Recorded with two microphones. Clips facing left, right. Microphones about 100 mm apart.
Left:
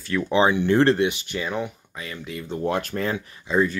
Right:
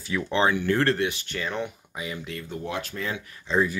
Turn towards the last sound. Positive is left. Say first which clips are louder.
# left 2 dB
turn(degrees=10)  # may be behind; listen again after turning